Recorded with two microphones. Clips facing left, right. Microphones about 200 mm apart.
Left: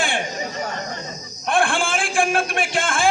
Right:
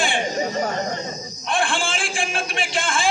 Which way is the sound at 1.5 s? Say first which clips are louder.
Left 3 dB; 55° left (ahead or behind).